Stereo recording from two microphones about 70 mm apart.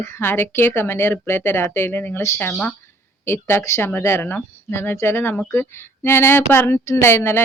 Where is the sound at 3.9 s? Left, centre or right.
Left.